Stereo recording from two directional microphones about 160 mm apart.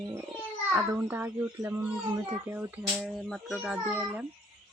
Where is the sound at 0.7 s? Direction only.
10° right (ahead or behind).